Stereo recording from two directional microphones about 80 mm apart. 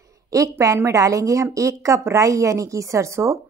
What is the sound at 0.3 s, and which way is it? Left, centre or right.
A woman's voice, right.